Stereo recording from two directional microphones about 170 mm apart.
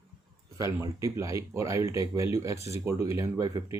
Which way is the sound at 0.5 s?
20° right (ahead or behind).